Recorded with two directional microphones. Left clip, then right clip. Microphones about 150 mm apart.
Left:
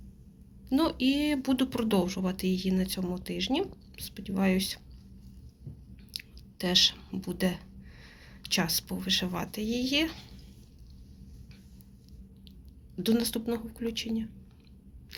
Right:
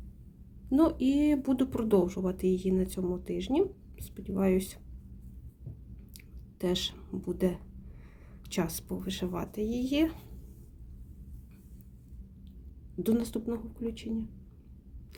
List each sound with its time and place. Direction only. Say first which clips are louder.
0.7 s speech: right 1 dB; 25° right (ahead or behind)
6.6 s speech: left 8 dB; 25° right (ahead or behind)
13.1 s speech: left 2 dB; 20° right (ahead or behind)